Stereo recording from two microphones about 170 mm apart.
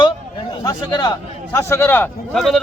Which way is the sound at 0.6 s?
20° left (ahead or behind).